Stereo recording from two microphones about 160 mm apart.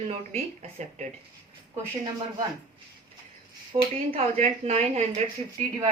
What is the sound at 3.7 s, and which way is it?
Speech, 35° right (ahead or behind).